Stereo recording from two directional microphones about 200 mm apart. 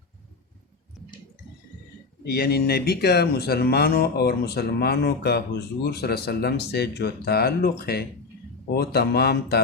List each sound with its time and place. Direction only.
2.2 s speech: 50° left (ahead or behind)